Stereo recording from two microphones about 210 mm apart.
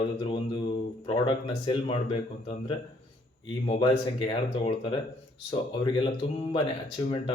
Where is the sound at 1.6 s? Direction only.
25° left (ahead or behind).